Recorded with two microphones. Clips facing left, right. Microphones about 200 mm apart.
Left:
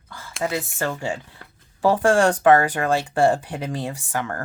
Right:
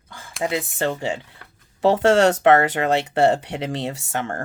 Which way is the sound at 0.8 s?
20° right (ahead or behind).